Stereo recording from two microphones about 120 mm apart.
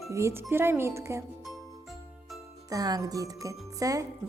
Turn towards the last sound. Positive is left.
turn(degrees=-30)  # may be behind; listen again after turning